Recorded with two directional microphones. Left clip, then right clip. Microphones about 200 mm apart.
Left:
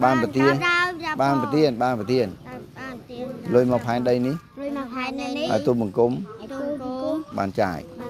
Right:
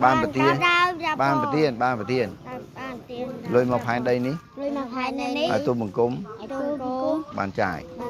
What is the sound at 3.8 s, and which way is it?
Speech, 50° left (ahead or behind).